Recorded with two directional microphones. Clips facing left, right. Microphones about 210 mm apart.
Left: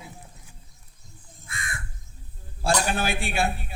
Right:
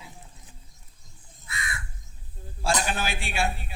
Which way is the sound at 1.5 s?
50° left (ahead or behind).